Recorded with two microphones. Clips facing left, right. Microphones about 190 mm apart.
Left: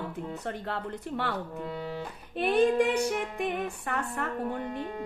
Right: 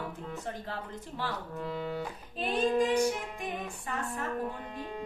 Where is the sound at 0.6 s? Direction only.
65° left (ahead or behind).